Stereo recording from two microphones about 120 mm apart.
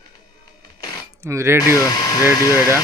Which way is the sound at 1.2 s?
25° right (ahead or behind).